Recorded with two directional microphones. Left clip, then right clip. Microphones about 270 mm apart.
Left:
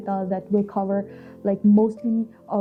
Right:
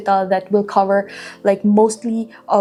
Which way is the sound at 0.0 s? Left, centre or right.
Centre.